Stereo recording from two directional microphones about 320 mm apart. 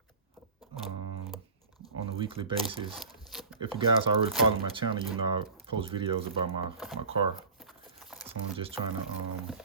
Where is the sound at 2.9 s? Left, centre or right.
Centre.